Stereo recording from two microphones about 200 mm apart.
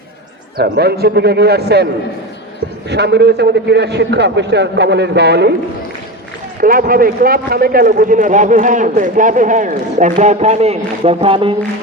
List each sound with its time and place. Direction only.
0.5 s a man's voice: 55° right (ahead or behind)
2.9 s a man's voice: 55° right (ahead or behind)
6.6 s a man's voice: 45° right (ahead or behind); by 11.5 s 25° right (ahead or behind)